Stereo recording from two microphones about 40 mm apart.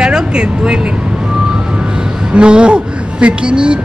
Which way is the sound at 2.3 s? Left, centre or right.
Right.